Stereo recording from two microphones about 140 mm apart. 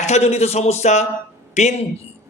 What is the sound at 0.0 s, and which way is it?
A man's voice, 50° left (ahead or behind).